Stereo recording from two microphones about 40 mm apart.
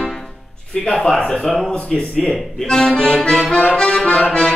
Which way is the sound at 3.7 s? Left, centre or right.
Centre.